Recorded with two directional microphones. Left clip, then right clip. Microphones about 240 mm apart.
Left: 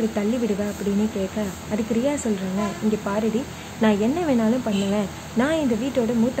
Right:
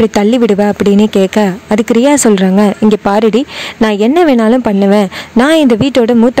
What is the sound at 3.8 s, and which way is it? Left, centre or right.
Speech, right.